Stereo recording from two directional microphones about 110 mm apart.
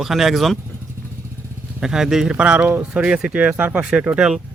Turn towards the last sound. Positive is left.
turn(degrees=-5)  # may be behind; listen again after turning